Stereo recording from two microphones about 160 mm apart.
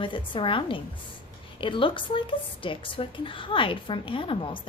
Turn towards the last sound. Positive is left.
turn(degrees=35)  # may be behind; listen again after turning